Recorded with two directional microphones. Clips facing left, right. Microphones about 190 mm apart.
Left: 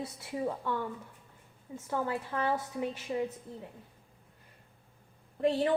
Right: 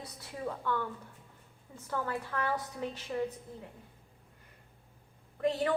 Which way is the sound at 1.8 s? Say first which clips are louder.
Left 2 dB; 20° left (ahead or behind).